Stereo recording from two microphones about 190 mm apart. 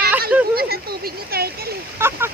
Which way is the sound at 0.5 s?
55° right (ahead or behind).